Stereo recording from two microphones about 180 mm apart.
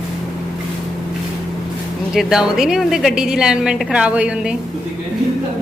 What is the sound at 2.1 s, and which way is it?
A woman's voice, centre (ahead or behind).